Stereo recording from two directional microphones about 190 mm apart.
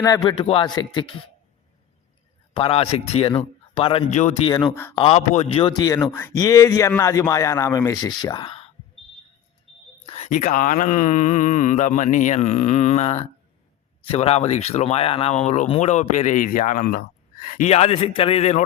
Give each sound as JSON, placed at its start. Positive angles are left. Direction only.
{"t": 0.0, "sound": "speech", "side_deg": 20}
{"t": 2.5, "sound": "speech", "side_deg": 30}
{"t": 4.7, "sound": "a man's voice", "side_deg": 15}
{"t": 4.9, "sound": "a man's voice", "side_deg": 30}
{"t": 10.1, "sound": "a man's voice", "side_deg": 40}
{"t": 17.7, "sound": "speech", "side_deg": 30}